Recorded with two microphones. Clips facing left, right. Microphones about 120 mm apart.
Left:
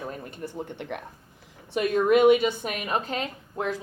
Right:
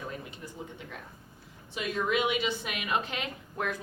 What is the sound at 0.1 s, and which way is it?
Speech, 50° left (ahead or behind).